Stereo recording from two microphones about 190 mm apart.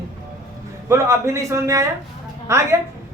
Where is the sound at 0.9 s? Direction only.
15° right (ahead or behind).